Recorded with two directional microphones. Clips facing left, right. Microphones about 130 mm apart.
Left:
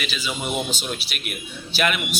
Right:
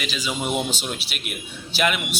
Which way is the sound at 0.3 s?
20° right (ahead or behind).